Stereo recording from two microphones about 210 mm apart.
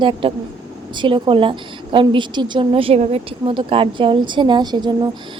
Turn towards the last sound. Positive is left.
turn(degrees=-20)  # may be behind; listen again after turning